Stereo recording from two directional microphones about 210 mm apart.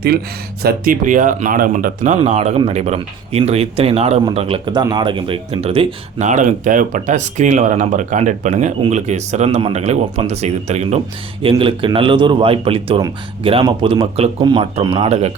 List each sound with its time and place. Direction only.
0.6 s a man's voice: 40° right (ahead or behind)